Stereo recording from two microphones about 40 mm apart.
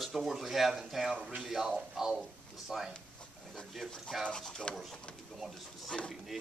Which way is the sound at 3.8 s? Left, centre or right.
Centre.